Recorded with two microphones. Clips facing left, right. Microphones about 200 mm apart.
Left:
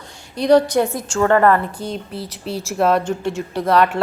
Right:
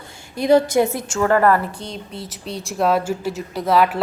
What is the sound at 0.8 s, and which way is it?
Speech, 10° right (ahead or behind).